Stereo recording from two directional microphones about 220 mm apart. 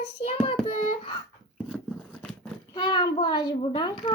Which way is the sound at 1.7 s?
5° left (ahead or behind).